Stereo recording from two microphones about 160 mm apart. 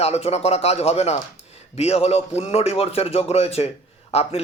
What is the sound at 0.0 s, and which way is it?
Speech, 40° left (ahead or behind).